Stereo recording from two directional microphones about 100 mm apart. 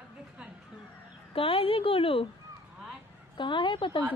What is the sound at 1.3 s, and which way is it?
Speech, 65° left (ahead or behind).